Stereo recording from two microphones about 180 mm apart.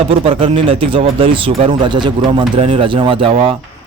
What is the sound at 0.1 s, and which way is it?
Speech, 35° right (ahead or behind).